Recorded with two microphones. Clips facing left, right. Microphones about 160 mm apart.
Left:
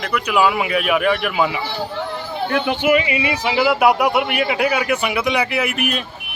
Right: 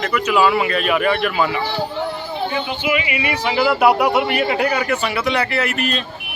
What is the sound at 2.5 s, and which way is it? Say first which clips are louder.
Speech: left 8 dB; 65° left (ahead or behind).